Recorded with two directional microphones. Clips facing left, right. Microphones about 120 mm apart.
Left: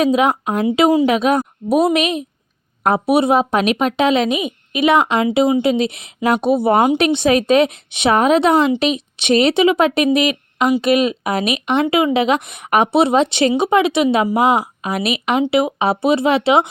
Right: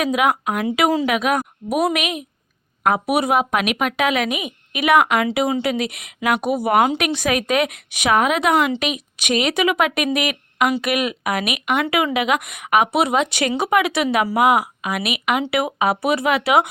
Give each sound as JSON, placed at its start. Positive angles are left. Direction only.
{"t": 0.0, "sound": "a woman's voice", "side_deg": 30}